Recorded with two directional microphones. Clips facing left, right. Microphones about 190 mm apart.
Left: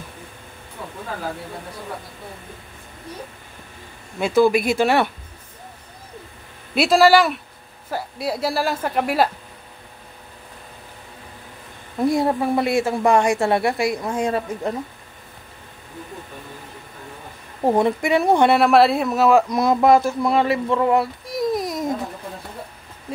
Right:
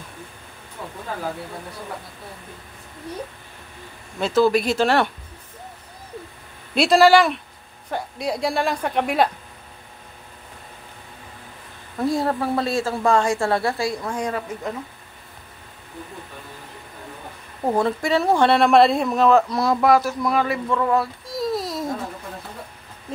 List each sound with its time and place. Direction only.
4.2 s a woman's voice: 10° left (ahead or behind)
6.7 s a woman's voice: 5° left (ahead or behind)
12.0 s a woman's voice: 15° left (ahead or behind)
17.6 s a woman's voice: 20° left (ahead or behind)
18.6 s a woman's voice: 5° left (ahead or behind)
19.5 s speech: 20° left (ahead or behind)